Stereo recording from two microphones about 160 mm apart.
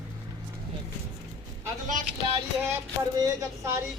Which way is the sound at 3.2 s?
20° right (ahead or behind).